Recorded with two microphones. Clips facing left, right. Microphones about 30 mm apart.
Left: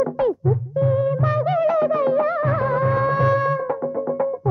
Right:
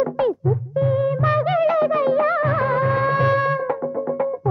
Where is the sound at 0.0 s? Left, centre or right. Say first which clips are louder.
Even; right.